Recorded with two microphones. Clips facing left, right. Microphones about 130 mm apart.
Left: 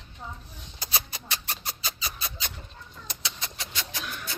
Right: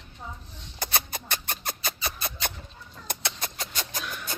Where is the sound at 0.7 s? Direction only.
55° right (ahead or behind).